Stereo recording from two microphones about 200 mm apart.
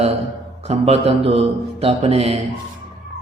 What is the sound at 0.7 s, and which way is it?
A man's voice, 30° right (ahead or behind).